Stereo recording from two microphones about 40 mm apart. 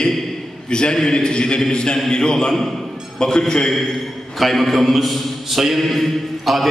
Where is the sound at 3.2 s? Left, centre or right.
Centre.